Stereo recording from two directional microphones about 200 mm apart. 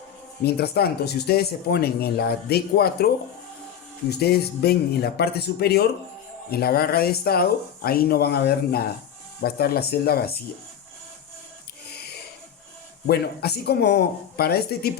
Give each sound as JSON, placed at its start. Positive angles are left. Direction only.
{"t": 0.4, "sound": "speech", "side_deg": 50}
{"t": 4.1, "sound": "speech", "side_deg": 55}
{"t": 11.9, "sound": "music", "side_deg": 50}
{"t": 13.1, "sound": "speech", "side_deg": 55}